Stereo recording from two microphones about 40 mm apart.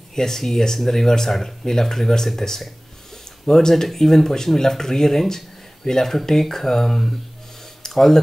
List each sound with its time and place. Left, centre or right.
0.1 s speech: centre